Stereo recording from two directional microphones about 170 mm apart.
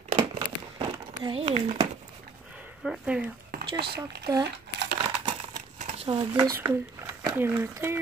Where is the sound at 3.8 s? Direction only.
70° right (ahead or behind).